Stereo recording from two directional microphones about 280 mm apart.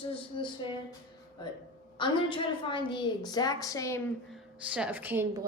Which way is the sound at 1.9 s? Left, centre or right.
Centre.